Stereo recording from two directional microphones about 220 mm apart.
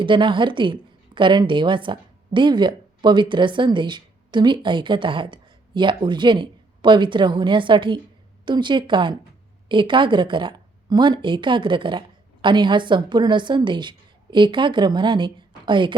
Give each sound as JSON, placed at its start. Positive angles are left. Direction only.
{"t": 0.0, "sound": "a woman's voice", "side_deg": -20}